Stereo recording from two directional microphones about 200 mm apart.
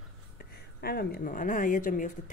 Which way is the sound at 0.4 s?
50° left (ahead or behind).